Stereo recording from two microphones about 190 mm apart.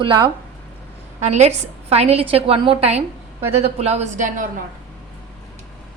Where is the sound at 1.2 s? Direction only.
35° right (ahead or behind).